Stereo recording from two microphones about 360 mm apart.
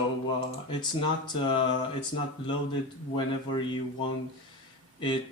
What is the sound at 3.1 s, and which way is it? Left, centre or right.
Speech, centre.